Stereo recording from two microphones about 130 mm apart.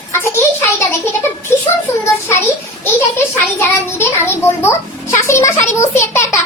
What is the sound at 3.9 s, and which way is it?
A child's voice, 20° left (ahead or behind).